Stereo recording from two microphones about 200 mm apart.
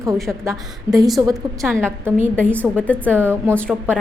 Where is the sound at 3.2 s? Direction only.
10° right (ahead or behind).